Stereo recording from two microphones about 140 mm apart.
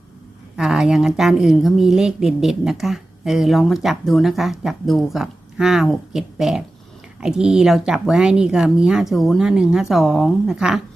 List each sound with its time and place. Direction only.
0.5 s a woman's voice: centre (ahead or behind)